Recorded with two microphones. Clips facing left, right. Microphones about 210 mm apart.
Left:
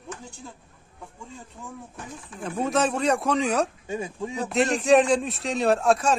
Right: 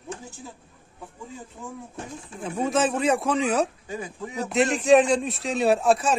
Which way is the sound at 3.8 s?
25° left (ahead or behind).